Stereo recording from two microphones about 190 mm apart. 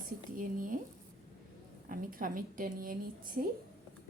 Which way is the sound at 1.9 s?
45° right (ahead or behind).